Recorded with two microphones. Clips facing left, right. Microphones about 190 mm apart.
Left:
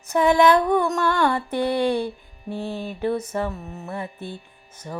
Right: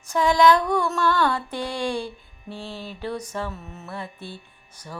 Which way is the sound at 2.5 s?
15° left (ahead or behind).